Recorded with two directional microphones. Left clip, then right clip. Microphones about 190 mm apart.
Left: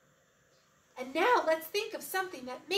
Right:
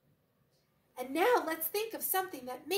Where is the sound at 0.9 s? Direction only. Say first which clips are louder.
Left 1 dB; 20° right (ahead or behind).